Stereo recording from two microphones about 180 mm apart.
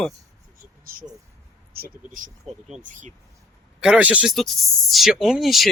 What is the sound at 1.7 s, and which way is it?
Speech, 55° right (ahead or behind).